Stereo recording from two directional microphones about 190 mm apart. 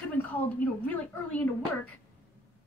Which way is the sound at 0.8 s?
5° left (ahead or behind).